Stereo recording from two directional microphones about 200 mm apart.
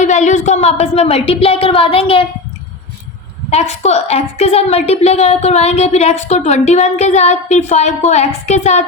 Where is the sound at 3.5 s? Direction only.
35° left (ahead or behind).